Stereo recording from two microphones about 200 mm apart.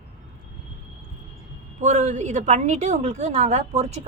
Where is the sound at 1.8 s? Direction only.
35° right (ahead or behind).